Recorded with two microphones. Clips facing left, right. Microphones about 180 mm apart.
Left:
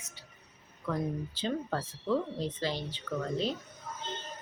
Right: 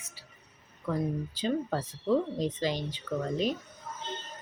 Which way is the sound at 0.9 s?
10° right (ahead or behind).